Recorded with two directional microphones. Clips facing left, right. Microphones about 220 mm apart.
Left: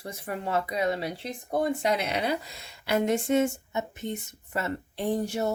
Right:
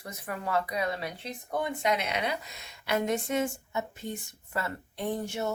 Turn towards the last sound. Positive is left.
turn(degrees=35)  # may be behind; listen again after turning